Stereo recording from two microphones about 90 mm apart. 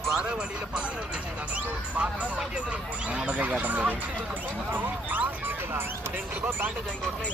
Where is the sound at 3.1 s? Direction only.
15° right (ahead or behind).